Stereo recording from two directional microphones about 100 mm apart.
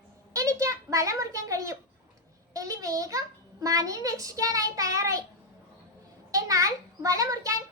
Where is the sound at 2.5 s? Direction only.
35° right (ahead or behind).